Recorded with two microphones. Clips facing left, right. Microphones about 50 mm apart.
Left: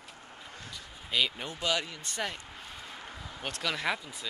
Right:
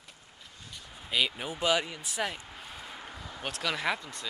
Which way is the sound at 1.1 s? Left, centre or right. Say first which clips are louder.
Right 1 dB; centre.